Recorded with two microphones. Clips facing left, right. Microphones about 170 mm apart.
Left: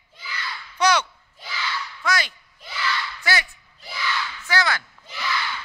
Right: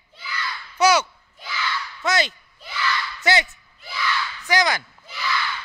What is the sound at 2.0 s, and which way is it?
A man's voice, 25° right (ahead or behind).